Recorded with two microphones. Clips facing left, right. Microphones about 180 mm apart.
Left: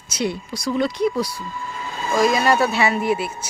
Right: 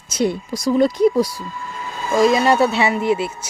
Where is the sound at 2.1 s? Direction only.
25° right (ahead or behind).